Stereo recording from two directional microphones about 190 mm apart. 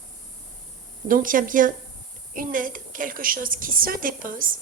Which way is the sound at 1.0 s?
45° right (ahead or behind).